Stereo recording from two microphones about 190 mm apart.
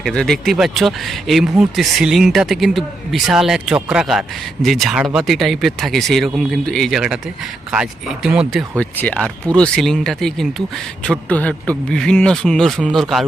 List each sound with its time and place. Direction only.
0.0 s speech: 5° left (ahead or behind)
8.8 s speech: 5° left (ahead or behind)